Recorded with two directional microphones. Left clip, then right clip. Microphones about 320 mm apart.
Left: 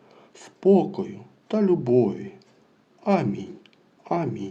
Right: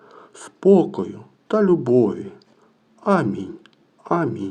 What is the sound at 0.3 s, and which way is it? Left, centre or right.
Speech, right.